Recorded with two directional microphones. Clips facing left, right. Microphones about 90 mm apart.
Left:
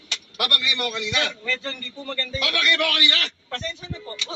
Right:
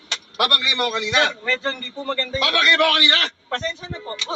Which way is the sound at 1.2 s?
60° right (ahead or behind).